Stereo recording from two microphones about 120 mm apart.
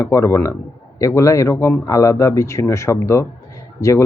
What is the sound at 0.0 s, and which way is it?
Speech, 25° left (ahead or behind).